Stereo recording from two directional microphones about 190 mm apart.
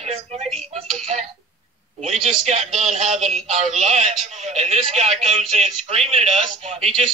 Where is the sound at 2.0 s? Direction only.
40° right (ahead or behind).